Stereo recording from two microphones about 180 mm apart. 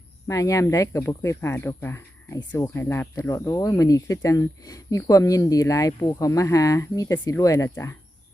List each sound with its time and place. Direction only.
0.3 s speech: 20° left (ahead or behind)